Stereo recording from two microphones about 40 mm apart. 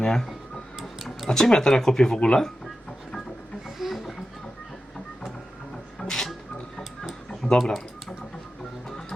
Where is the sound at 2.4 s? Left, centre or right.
Centre.